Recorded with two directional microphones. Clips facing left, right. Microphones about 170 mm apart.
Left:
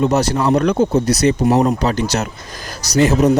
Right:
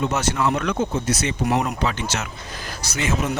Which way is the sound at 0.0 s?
35° left (ahead or behind).